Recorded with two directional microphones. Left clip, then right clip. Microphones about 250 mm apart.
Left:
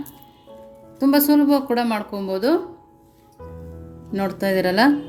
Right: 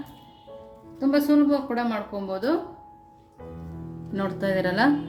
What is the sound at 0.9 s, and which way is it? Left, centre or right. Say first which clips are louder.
A woman's voice: left 4 dB; left.